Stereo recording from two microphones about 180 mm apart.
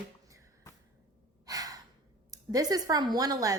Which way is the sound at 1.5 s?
20° right (ahead or behind).